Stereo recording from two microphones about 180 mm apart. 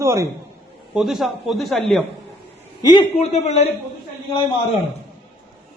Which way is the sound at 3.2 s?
35° left (ahead or behind).